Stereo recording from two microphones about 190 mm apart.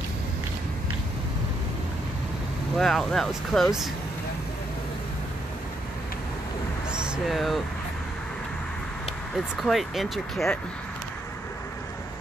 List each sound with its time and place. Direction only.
2.8 s speech: centre (ahead or behind)
6.9 s a sound: 5° right (ahead or behind)
9.3 s speech: centre (ahead or behind)